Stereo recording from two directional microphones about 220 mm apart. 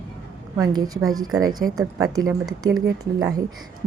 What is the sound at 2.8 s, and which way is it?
Speech, 15° right (ahead or behind).